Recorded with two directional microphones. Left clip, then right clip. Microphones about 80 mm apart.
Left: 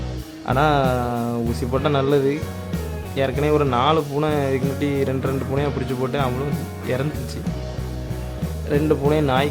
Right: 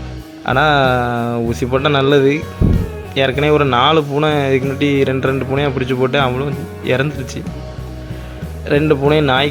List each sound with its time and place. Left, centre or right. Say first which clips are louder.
0.4 s speech: right 6 dB; right
8.9 s speech: right 5 dB; right